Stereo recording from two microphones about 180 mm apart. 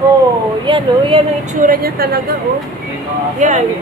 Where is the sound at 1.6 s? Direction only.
55° right (ahead or behind).